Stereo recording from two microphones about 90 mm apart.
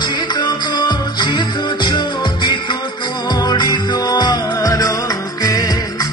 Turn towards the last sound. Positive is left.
turn(degrees=50)  # may be behind; listen again after turning